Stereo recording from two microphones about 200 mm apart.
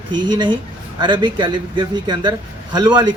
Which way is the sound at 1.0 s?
20° right (ahead or behind).